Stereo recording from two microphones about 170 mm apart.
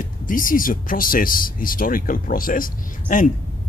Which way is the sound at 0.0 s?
55° left (ahead or behind).